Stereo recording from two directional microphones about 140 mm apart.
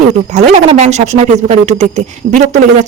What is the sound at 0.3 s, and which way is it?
Speech, 55° right (ahead or behind).